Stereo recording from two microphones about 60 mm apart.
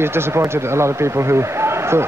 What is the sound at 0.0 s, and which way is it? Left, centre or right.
Speech, right.